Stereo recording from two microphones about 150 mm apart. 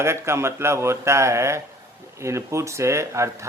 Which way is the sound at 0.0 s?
15° right (ahead or behind).